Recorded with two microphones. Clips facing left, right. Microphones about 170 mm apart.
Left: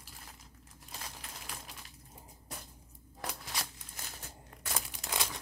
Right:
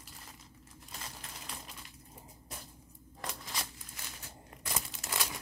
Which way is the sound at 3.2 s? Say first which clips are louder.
Left 1 dB; 5° left (ahead or behind).